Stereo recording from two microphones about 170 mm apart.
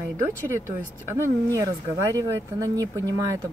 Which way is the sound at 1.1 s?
15° right (ahead or behind).